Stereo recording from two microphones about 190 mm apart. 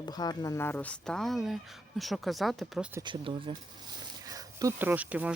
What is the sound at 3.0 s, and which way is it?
Speech, 25° right (ahead or behind).